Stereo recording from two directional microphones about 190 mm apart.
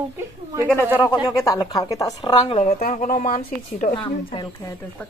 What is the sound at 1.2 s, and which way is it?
Speech, 20° left (ahead or behind).